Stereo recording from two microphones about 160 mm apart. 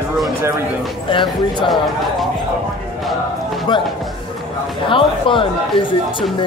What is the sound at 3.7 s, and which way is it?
Speech, 25° left (ahead or behind).